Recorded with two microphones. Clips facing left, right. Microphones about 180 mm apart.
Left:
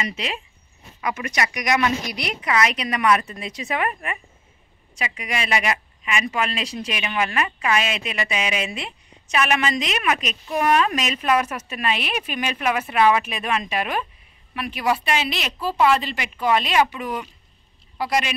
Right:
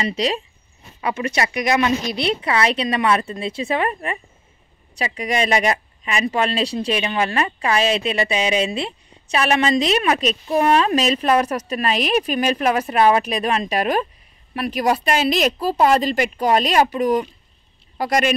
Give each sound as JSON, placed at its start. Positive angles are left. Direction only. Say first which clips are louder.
{"t": 0.0, "sound": "a woman's voice", "louder": "right 7 dB", "side_deg": -35}